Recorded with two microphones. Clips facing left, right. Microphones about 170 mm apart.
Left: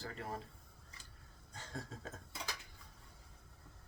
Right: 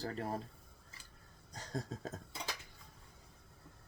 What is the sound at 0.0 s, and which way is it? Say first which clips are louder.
Speech: right 5 dB; 40° right (ahead or behind).